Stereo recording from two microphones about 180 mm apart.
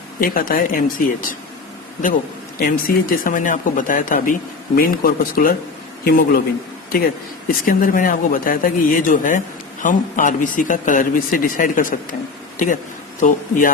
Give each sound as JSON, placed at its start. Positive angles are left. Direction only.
{"t": 0.2, "sound": "speech", "side_deg": 50}
{"t": 2.6, "sound": "a man's voice", "side_deg": 50}
{"t": 7.4, "sound": "a man's voice", "side_deg": 50}